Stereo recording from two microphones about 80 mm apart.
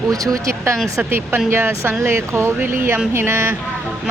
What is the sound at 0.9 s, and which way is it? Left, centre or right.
Speech, right.